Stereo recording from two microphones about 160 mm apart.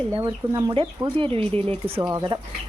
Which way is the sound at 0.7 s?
35° right (ahead or behind).